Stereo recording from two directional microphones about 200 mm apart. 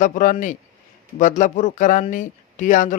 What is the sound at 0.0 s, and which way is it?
Speech, 40° left (ahead or behind).